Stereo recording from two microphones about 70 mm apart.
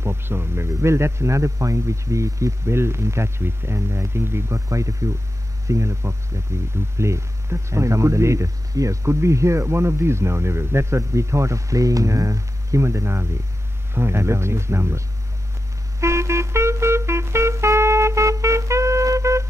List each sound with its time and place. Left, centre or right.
0.0 s speech: right
16.0 s music: right